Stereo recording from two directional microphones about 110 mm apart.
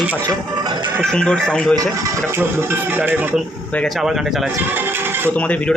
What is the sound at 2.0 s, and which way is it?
Speech, 20° right (ahead or behind).